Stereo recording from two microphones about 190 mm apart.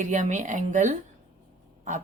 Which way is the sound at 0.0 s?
40° right (ahead or behind).